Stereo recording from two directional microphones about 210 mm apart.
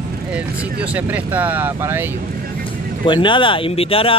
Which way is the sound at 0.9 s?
5° right (ahead or behind).